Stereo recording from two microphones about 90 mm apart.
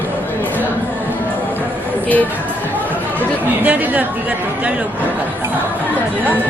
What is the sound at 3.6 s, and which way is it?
Speech, 15° right (ahead or behind).